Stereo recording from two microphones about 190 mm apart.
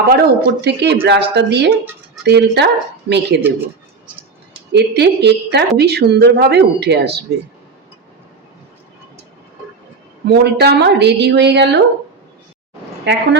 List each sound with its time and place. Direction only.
0.1 s speech: 55° right (ahead or behind)
4.7 s speech: 60° right (ahead or behind)
10.2 s speech: 60° right (ahead or behind)
13.1 s speech: 65° right (ahead or behind)